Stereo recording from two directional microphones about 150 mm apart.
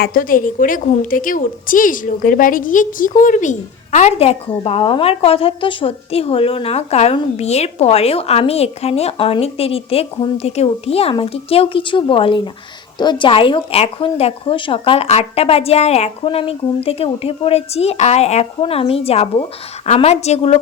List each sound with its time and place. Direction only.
0.0 s a woman's voice: 70° left (ahead or behind); by 20.6 s 45° left (ahead or behind)